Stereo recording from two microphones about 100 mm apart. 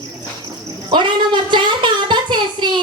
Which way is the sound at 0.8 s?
50° right (ahead or behind).